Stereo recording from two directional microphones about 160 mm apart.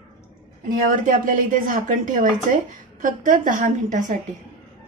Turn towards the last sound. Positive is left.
turn(degrees=-50)  # may be behind; listen again after turning